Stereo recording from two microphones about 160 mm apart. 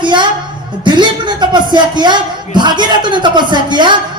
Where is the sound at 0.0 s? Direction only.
30° right (ahead or behind).